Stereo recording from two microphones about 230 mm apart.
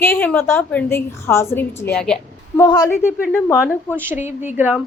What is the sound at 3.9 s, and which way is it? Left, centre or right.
Speech, centre.